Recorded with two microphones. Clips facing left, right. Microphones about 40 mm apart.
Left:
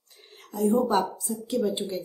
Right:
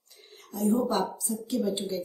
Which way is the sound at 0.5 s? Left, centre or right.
Left.